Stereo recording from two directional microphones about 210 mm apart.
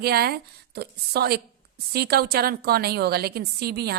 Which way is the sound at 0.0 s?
50° right (ahead or behind).